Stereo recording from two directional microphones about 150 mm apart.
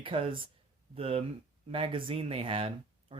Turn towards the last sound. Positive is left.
turn(degrees=-40)  # may be behind; listen again after turning